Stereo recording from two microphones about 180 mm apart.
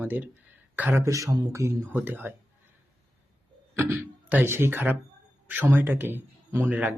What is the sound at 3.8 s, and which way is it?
Speech, 10° right (ahead or behind).